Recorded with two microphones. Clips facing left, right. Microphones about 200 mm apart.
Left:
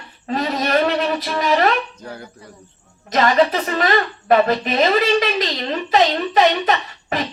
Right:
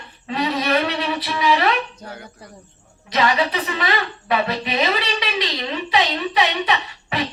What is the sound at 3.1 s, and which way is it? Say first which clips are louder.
Speech: left 4 dB; 45° left (ahead or behind).